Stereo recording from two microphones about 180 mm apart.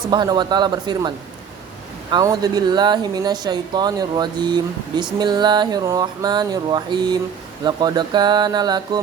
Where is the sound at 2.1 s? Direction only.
20° right (ahead or behind).